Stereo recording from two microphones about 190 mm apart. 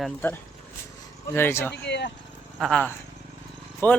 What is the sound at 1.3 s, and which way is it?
Speech, 10° left (ahead or behind).